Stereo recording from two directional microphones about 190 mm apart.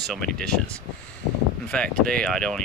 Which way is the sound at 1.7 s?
5° left (ahead or behind).